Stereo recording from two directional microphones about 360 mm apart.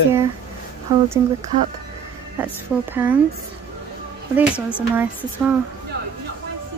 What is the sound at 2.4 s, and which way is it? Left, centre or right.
Speech, centre.